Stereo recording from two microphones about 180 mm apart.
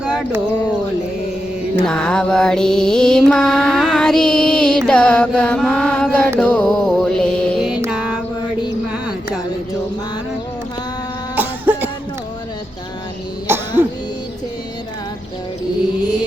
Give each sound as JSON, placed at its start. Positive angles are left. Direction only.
{"t": 0.0, "sound": "a sound", "side_deg": -5}
{"t": 1.8, "sound": "mantra", "side_deg": 5}
{"t": 6.4, "sound": "music", "side_deg": 5}
{"t": 8.9, "sound": "music", "side_deg": -5}
{"t": 11.3, "sound": "cough", "side_deg": -10}
{"t": 13.5, "sound": "throat clearing", "side_deg": -15}